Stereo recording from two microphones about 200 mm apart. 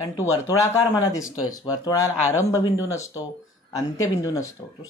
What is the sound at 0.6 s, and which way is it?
Speech, 15° left (ahead or behind).